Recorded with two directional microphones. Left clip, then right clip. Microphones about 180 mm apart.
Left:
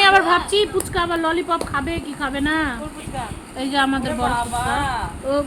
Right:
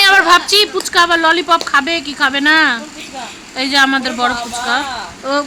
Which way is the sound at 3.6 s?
10° right (ahead or behind).